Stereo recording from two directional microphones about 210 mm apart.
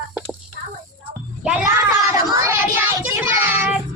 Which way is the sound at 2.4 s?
10° right (ahead or behind).